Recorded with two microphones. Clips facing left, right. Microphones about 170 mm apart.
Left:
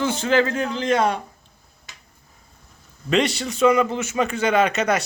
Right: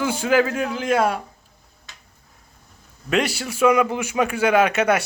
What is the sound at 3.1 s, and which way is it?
Speech, 5° right (ahead or behind).